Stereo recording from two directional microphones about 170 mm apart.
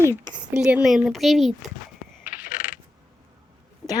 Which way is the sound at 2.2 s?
10° right (ahead or behind).